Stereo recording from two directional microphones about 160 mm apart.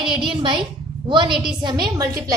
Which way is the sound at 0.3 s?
30° right (ahead or behind).